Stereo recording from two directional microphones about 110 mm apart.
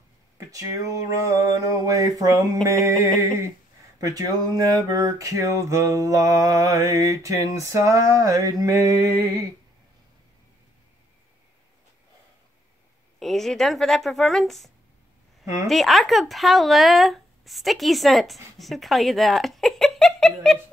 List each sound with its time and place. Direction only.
0.5 s a sound: 30° right (ahead or behind)
13.2 s speech: centre (ahead or behind)
15.4 s a woman's voice: 25° right (ahead or behind)
15.7 s speech: centre (ahead or behind)